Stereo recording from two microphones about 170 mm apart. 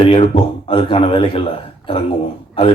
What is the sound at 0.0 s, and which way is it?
Speech, 35° left (ahead or behind).